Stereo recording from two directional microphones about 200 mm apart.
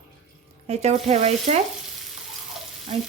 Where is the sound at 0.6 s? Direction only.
30° right (ahead or behind).